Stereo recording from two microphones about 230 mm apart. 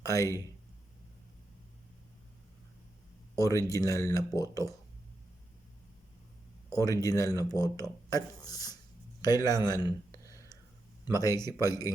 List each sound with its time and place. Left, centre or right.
0.0 s speech: centre
3.3 s speech: centre
6.7 s speech: centre
9.2 s a sound: centre
11.0 s speech: centre